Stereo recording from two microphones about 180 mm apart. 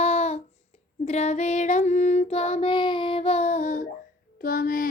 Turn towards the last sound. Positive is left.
turn(degrees=50)  # may be behind; listen again after turning